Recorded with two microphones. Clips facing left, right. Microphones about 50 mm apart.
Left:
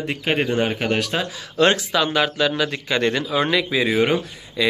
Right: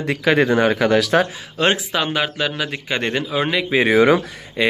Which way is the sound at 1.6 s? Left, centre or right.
Centre.